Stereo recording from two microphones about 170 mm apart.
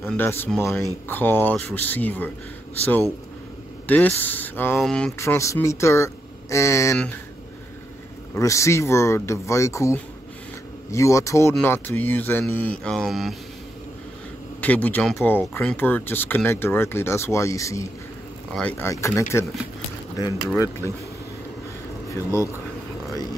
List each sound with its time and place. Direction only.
0.0 s speech: 10° left (ahead or behind)
3.8 s speech: 10° left (ahead or behind)
4.7 s mantra: 5° left (ahead or behind)
5.2 s speech: 15° left (ahead or behind)
8.4 s speech: 15° left (ahead or behind)
12.8 s mantra: 5° left (ahead or behind)
14.6 s speech: 10° left (ahead or behind)
18.5 s speech: 5° left (ahead or behind)
22.1 s speech: 15° left (ahead or behind)